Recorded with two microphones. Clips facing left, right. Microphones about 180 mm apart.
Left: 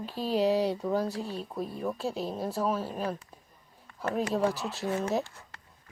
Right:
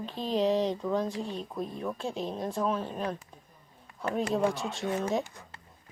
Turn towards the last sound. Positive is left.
turn(degrees=5)  # may be behind; listen again after turning